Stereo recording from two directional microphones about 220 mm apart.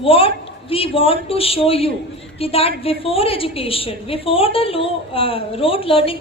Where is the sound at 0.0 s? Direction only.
25° left (ahead or behind).